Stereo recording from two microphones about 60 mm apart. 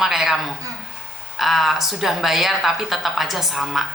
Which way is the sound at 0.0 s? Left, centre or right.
Centre.